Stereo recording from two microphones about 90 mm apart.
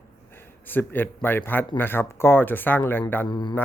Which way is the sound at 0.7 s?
20° left (ahead or behind).